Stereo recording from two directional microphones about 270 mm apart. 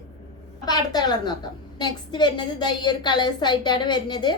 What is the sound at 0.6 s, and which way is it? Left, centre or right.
A woman's voice, centre.